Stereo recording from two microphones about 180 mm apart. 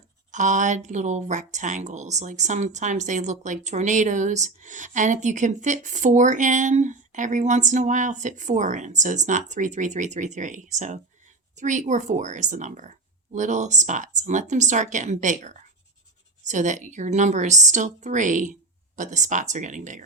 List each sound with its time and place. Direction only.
0.3 s speech: 45° right (ahead or behind)